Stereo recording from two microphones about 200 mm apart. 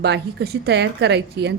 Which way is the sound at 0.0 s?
55° right (ahead or behind).